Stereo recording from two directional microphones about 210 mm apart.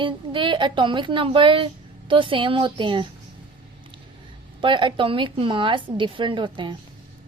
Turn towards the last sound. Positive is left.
turn(degrees=-25)  # may be behind; listen again after turning